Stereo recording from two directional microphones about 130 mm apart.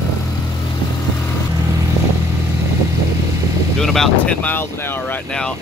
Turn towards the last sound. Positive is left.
turn(degrees=10)  # may be behind; listen again after turning